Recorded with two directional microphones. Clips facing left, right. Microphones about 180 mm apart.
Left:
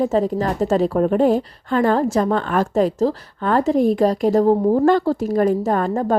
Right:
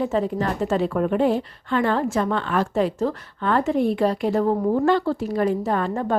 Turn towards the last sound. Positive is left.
turn(degrees=40)  # may be behind; listen again after turning